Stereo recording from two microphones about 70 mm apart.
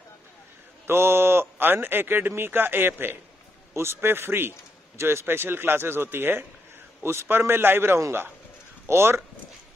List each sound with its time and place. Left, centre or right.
0.8 s a man's voice: right
4.0 s a man's voice: right